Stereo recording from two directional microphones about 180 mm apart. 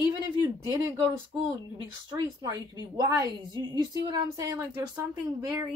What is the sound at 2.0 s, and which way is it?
Speech, 20° right (ahead or behind).